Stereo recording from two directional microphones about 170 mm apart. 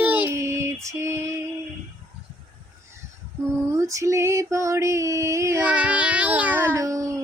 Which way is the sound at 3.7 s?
20° right (ahead or behind).